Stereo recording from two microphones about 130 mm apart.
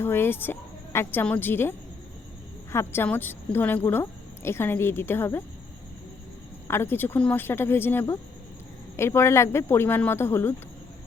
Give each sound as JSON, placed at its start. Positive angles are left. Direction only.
{"t": 0.0, "sound": "a woman's voice", "side_deg": 15}
{"t": 2.7, "sound": "a woman's voice", "side_deg": 15}
{"t": 6.7, "sound": "a woman's voice", "side_deg": 15}